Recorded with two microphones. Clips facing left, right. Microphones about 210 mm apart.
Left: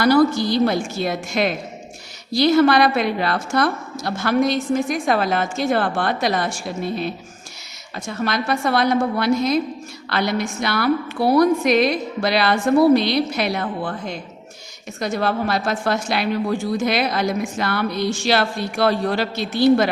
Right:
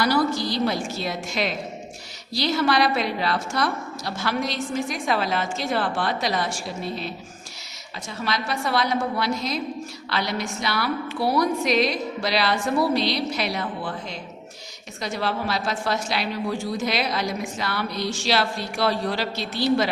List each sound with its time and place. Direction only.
0.0 s a woman's voice: 50° left (ahead or behind)